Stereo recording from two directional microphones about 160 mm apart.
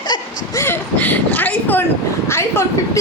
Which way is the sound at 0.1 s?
25° left (ahead or behind).